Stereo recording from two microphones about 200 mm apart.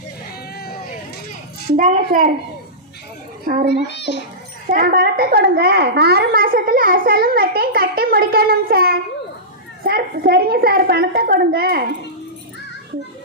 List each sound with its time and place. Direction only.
0.5 s a sound: 50° left (ahead or behind)
1.7 s a woman's voice: 40° right (ahead or behind)
3.4 s a child's voice: 45° right (ahead or behind)
3.8 s a child's voice: 60° left (ahead or behind)
4.6 s a woman's voice: 45° right (ahead or behind)